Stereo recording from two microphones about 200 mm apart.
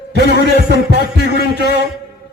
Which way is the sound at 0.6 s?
55° right (ahead or behind).